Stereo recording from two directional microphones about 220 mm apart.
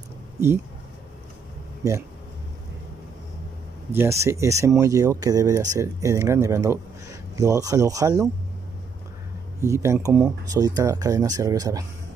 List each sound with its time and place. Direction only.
1.8 s a man's voice: 15° right (ahead or behind)
3.9 s a man's voice: 10° right (ahead or behind)
9.6 s a man's voice: 15° right (ahead or behind)